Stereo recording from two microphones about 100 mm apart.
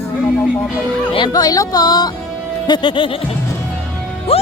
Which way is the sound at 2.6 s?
50° left (ahead or behind).